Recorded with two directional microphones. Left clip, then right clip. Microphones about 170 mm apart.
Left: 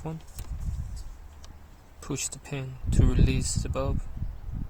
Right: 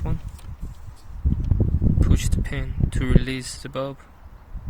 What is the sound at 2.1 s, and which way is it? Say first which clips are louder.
Speech: right 5 dB; 10° right (ahead or behind).